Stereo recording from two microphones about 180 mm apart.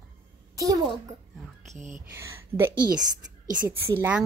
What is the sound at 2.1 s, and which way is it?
Speech, 15° right (ahead or behind).